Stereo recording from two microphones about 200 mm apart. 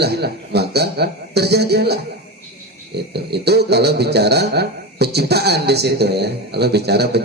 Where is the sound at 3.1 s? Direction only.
55° right (ahead or behind).